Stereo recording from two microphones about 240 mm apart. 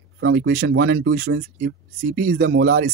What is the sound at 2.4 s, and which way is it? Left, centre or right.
Speech, right.